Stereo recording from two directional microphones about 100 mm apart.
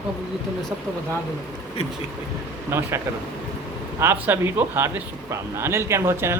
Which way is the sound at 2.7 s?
25° right (ahead or behind).